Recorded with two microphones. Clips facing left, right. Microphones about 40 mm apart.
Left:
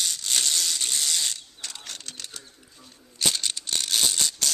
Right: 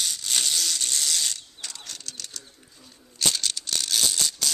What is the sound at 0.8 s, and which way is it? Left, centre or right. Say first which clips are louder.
Ratchet: even; centre.